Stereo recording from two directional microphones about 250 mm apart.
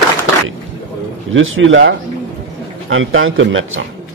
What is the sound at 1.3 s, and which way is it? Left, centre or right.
Speech, right.